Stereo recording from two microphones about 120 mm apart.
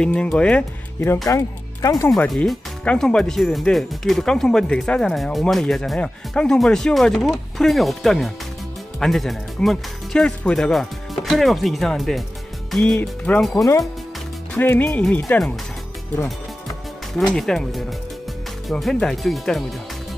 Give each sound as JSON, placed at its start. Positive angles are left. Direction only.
{"t": 0.0, "sound": "speech", "side_deg": 5}
{"t": 1.0, "sound": "speech", "side_deg": 25}
{"t": 2.0, "sound": "speech", "side_deg": 5}
{"t": 14.5, "sound": "speech", "side_deg": 15}
{"t": 17.1, "sound": "speech", "side_deg": 5}